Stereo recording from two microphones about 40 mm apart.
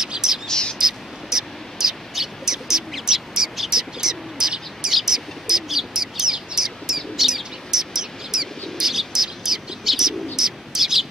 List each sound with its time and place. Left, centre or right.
0.0 s bird: centre
0.5 s whispering: centre
0.7 s bird: centre